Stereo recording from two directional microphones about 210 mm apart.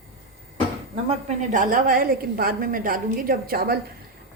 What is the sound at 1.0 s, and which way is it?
A woman's voice, 35° right (ahead or behind).